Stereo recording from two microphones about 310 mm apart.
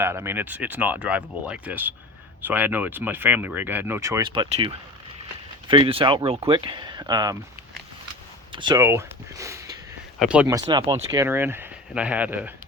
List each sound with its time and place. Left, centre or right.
0.0 s speech: centre
5.6 s speech: centre
8.5 s speech: centre